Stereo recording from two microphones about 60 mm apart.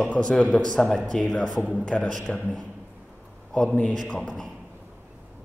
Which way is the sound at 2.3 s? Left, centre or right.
Centre.